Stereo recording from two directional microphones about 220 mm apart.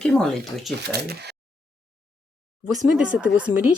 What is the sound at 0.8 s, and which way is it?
Speech, 45° right (ahead or behind).